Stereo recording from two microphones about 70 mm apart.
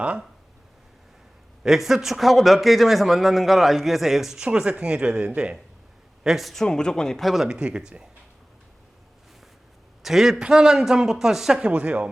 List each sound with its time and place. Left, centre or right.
1.6 s a man's voice: centre
6.2 s a man's voice: centre
7.4 s a man's voice: centre
10.0 s a man's voice: centre
11.6 s a man's voice: centre